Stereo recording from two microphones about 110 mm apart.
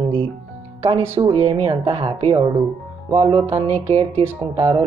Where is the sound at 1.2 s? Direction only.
50° right (ahead or behind).